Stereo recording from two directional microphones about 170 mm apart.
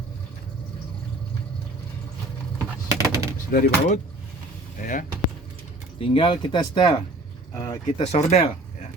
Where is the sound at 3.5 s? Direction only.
55° left (ahead or behind).